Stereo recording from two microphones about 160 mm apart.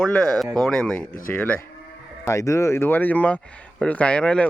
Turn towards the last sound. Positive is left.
turn(degrees=5)  # may be behind; listen again after turning